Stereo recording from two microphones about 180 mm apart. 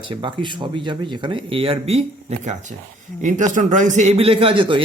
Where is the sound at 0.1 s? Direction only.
25° right (ahead or behind).